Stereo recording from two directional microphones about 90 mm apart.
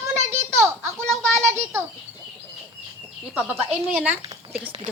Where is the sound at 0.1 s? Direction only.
30° right (ahead or behind).